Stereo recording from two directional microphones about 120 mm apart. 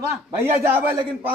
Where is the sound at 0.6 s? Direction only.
20° right (ahead or behind).